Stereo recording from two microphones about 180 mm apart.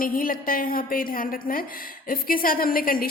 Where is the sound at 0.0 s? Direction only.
50° left (ahead or behind).